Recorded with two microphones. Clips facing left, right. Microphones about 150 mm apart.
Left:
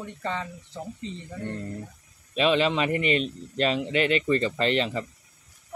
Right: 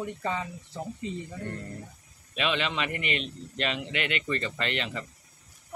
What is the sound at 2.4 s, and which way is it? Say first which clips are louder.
A man's voice: left 7 dB; 35° left (ahead or behind).